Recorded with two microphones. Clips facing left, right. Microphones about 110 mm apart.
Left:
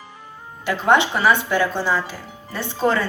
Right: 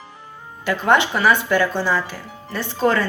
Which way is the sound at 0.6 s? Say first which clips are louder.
Even; 20° left (ahead or behind).